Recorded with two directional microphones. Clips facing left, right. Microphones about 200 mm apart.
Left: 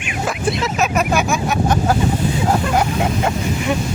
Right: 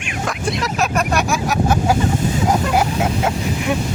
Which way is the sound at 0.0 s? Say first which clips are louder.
Left 2 dB; centre (ahead or behind).